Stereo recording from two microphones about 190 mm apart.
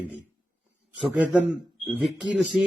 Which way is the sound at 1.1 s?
10° right (ahead or behind).